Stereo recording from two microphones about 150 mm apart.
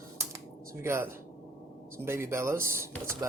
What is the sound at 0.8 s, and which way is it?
Speech, 15° right (ahead or behind).